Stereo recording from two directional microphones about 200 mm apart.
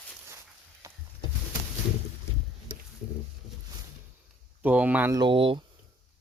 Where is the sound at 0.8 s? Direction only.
15° right (ahead or behind).